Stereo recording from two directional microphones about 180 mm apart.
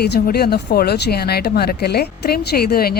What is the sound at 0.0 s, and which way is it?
Speech, 60° left (ahead or behind).